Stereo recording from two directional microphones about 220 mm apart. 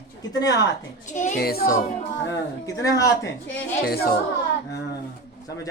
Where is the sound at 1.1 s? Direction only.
35° left (ahead or behind).